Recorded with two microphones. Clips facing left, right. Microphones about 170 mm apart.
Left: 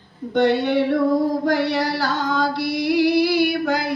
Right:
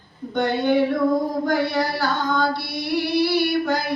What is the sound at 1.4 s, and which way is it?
Female singing, 85° left.